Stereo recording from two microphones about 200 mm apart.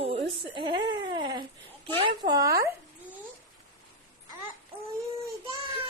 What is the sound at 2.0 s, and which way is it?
Speech, 25° right (ahead or behind).